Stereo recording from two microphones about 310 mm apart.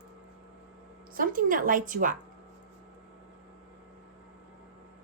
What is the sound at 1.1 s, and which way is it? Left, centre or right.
A woman's voice, right.